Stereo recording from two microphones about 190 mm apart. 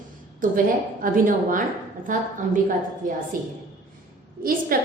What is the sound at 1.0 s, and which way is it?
Speech, 45° right (ahead or behind).